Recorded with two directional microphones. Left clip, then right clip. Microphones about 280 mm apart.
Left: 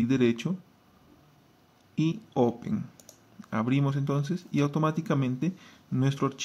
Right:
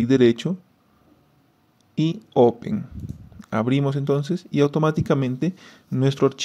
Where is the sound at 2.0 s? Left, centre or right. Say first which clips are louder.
Right 9 dB; right.